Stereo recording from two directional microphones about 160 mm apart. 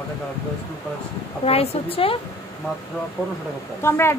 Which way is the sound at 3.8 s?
15° left (ahead or behind).